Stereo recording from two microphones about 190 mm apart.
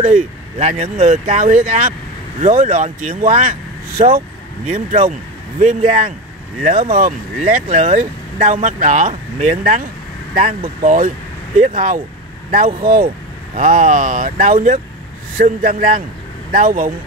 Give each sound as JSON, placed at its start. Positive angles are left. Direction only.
{"t": 0.0, "sound": "speech", "side_deg": -40}
{"t": 6.9, "sound": "speech", "side_deg": -45}